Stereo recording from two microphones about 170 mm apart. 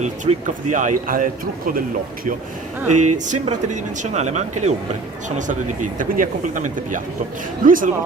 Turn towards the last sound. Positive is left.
turn(degrees=-55)  # may be behind; listen again after turning